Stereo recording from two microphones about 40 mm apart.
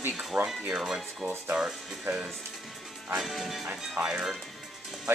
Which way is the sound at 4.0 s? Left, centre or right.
Right.